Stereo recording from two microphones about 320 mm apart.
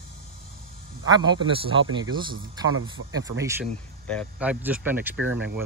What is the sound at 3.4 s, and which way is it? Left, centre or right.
Speech, centre.